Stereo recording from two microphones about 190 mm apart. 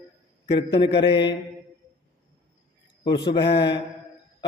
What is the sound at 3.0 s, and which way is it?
Speech, 25° left (ahead or behind).